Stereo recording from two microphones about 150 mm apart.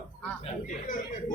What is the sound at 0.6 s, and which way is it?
Speech, 55° left (ahead or behind).